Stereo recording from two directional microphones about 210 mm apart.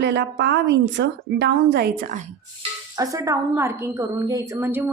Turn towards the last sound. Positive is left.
turn(degrees=-10)  # may be behind; listen again after turning